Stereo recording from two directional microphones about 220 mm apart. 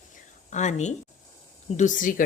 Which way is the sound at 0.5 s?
35° left (ahead or behind).